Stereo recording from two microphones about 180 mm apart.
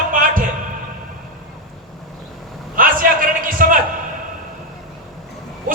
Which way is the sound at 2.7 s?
50° right (ahead or behind).